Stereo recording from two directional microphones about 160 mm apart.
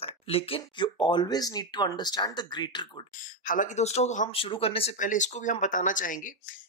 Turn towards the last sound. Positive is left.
turn(degrees=55)  # may be behind; listen again after turning